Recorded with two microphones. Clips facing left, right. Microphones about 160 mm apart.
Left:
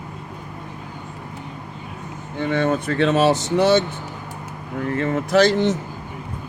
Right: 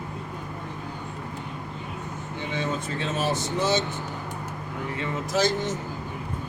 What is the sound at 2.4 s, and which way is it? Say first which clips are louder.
Speech: left 10 dB; 60° left (ahead or behind).